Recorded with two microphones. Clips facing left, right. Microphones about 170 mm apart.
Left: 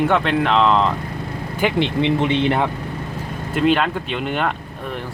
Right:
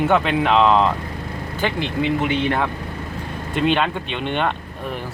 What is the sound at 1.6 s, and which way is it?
Speech, 10° left (ahead or behind).